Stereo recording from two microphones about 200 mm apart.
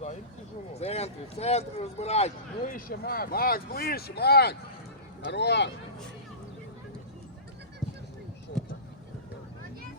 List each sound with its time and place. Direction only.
0.7 s speech: 30° left (ahead or behind); by 5.7 s 60° left (ahead or behind)